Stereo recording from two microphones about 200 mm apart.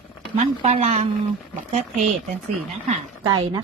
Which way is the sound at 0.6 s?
35° right (ahead or behind).